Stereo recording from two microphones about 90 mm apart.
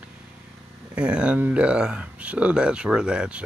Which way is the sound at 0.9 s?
10° right (ahead or behind).